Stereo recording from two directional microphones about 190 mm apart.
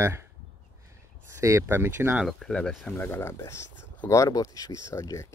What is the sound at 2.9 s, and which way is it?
Speech, 15° left (ahead or behind).